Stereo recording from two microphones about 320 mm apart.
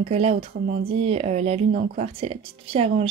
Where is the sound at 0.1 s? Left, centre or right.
Centre.